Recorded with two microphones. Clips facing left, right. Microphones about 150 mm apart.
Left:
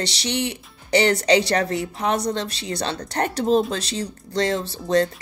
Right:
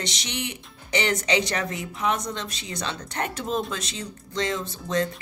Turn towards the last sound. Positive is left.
turn(degrees=35)  # may be behind; listen again after turning